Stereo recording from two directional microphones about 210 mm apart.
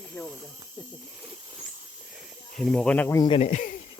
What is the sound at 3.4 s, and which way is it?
Speech, 35° left (ahead or behind).